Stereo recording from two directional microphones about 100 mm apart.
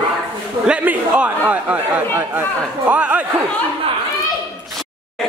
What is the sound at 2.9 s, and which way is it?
Speech, 15° right (ahead or behind).